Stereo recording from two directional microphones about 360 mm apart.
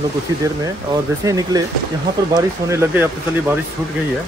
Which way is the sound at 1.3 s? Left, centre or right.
Centre.